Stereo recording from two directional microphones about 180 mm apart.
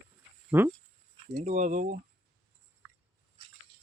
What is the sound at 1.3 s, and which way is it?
Speech, 40° right (ahead or behind).